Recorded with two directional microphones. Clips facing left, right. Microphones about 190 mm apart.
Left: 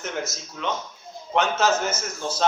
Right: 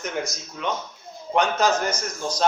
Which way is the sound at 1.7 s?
5° left (ahead or behind).